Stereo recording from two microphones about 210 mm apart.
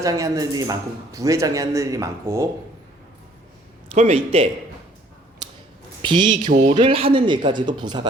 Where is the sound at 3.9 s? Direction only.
30° right (ahead or behind).